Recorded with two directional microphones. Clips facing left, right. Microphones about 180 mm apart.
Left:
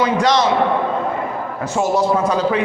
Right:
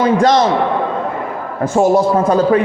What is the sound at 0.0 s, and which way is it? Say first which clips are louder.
Speech: right 4 dB; 50° right (ahead or behind).